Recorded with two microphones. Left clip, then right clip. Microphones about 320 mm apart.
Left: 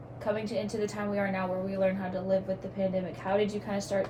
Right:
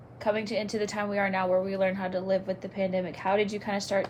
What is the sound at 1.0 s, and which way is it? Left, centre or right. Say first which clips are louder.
Speech: right 4 dB; right.